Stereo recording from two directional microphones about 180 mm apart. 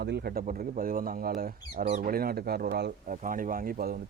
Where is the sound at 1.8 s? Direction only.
40° right (ahead or behind).